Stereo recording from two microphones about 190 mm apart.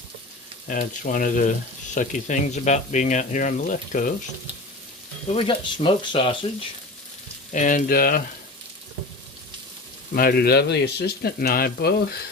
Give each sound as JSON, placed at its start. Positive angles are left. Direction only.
{"t": 0.7, "sound": "speech", "side_deg": 45}
{"t": 5.3, "sound": "speech", "side_deg": 30}
{"t": 7.5, "sound": "speech", "side_deg": 40}
{"t": 10.2, "sound": "speech", "side_deg": 55}